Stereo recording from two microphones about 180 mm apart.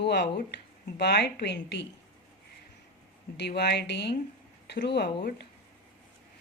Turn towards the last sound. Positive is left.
turn(degrees=65)  # may be behind; listen again after turning